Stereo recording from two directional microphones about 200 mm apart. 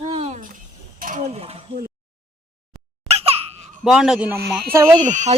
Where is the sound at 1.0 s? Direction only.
40° right (ahead or behind).